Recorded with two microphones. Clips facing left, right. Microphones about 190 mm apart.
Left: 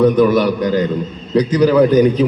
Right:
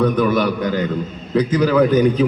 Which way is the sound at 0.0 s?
10° left (ahead or behind).